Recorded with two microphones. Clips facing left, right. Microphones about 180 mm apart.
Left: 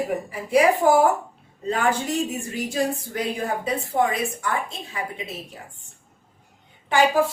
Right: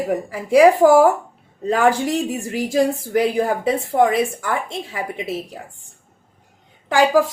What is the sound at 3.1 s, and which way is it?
A woman's voice, 90° right.